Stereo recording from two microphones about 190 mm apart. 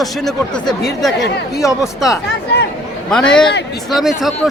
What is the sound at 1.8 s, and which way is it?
Speech, centre (ahead or behind).